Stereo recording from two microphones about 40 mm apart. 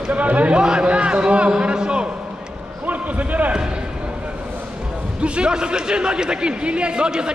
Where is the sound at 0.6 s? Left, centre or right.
Right.